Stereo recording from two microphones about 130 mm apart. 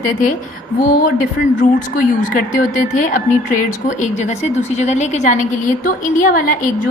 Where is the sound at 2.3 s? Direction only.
80° left.